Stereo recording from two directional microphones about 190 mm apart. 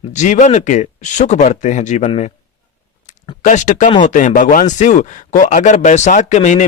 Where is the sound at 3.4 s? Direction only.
40° left (ahead or behind).